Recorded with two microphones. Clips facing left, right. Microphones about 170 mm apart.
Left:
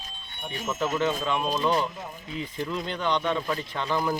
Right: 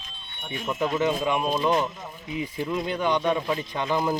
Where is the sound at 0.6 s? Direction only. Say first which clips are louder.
Right 2 dB; 15° right (ahead or behind).